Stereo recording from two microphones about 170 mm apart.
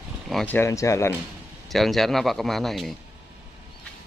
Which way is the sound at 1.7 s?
Centre (ahead or behind).